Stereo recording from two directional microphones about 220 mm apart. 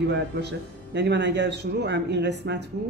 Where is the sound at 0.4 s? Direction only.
50° right (ahead or behind).